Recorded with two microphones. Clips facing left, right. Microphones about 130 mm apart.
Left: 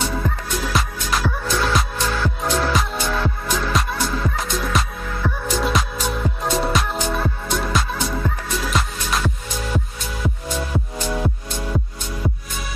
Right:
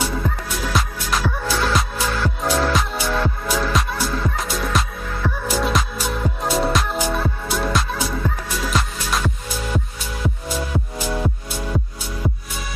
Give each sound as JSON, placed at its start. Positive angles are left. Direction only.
{"t": 0.7, "sound": "music", "side_deg": 0}